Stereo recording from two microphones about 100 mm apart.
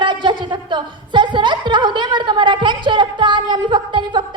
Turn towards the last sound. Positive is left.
turn(degrees=-50)  # may be behind; listen again after turning